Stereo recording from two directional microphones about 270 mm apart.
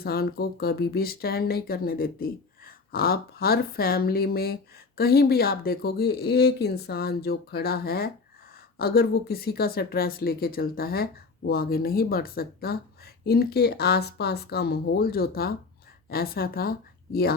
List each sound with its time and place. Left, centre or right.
0.0 s speech: left